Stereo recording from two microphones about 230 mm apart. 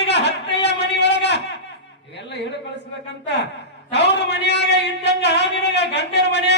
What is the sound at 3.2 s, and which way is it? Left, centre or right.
A man's voice, left.